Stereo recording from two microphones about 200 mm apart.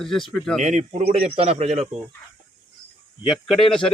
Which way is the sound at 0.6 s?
35° right (ahead or behind).